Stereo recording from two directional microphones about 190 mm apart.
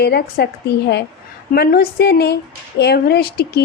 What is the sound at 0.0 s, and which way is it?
Speech, 55° left (ahead or behind).